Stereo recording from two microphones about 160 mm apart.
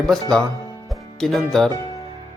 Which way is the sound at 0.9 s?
Centre (ahead or behind).